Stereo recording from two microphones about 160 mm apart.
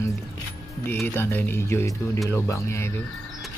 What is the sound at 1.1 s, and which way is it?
A man's voice, 15° left (ahead or behind).